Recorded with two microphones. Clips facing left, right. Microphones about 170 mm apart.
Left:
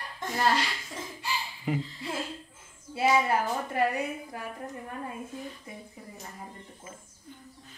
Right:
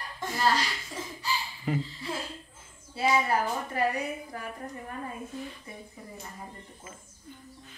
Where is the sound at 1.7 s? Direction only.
15° left (ahead or behind).